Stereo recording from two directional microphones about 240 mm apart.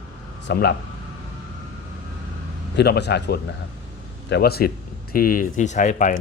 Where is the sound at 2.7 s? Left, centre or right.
Left.